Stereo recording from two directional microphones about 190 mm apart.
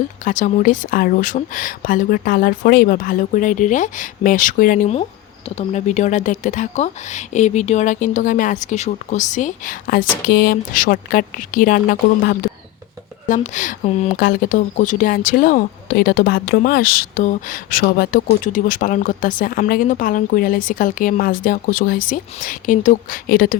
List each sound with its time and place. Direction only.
0.3 s a woman's voice: 45° left (ahead or behind)
14.2 s speech: 50° left (ahead or behind)